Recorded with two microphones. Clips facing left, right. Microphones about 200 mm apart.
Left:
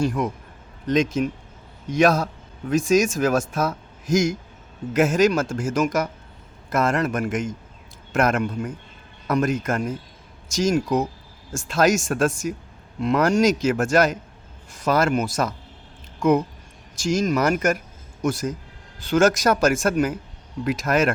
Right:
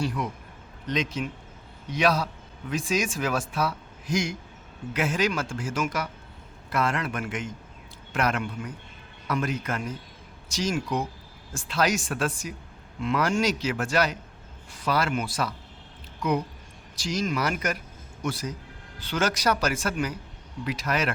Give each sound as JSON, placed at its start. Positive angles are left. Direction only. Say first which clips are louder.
{"t": 0.0, "sound": "speech", "louder": "left 6 dB", "side_deg": 45}
{"t": 16.9, "sound": "a man's voice", "louder": "left 7 dB", "side_deg": 45}